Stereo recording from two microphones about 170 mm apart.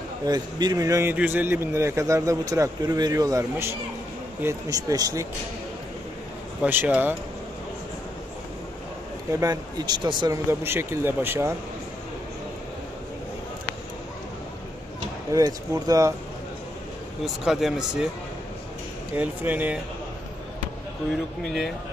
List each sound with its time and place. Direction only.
0.3 s speech: 25° right (ahead or behind)
6.6 s speech: 10° right (ahead or behind)
9.3 s speech: 20° right (ahead or behind)
15.3 s speech: 20° right (ahead or behind)
17.2 s speech: centre (ahead or behind)
19.1 s speech: 10° right (ahead or behind)